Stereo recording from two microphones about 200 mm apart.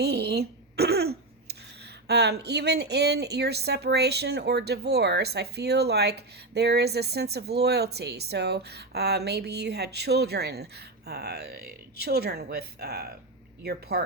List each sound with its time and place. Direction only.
0.0 s throat clearing: 55° right (ahead or behind)
2.0 s speech: 55° right (ahead or behind)